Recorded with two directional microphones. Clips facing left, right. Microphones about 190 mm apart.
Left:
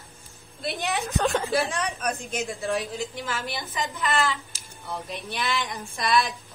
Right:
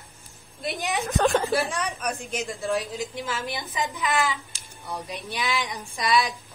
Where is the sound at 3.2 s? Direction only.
15° right (ahead or behind).